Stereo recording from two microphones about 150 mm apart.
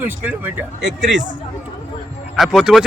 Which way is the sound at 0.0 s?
10° right (ahead or behind).